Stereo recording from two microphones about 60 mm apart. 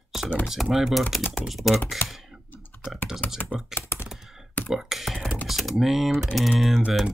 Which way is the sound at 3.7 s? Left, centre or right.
Left.